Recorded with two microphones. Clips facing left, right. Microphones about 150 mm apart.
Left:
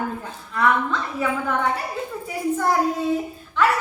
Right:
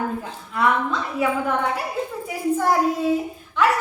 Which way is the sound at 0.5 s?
15° right (ahead or behind).